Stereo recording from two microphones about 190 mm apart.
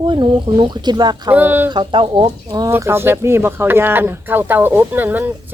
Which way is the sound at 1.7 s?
25° right (ahead or behind).